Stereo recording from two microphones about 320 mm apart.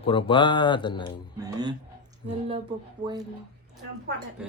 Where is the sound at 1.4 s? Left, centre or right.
Centre.